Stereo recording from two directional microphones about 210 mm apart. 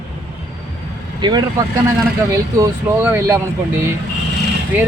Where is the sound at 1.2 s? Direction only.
20° right (ahead or behind).